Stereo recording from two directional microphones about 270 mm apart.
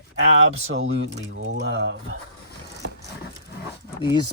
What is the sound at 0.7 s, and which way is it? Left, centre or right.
Speech, right.